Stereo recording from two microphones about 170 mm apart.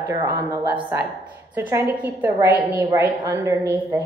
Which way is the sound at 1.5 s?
15° right (ahead or behind).